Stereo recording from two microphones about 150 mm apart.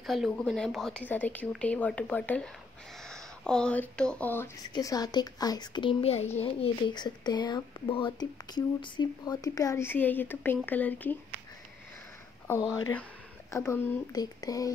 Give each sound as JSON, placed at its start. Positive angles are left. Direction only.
{"t": 0.0, "sound": "speech", "side_deg": 0}
{"t": 4.7, "sound": "speech", "side_deg": 25}
{"t": 13.5, "sound": "speech", "side_deg": 15}